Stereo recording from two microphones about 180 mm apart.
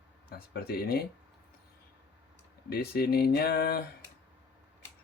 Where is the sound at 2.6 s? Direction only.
60° left (ahead or behind).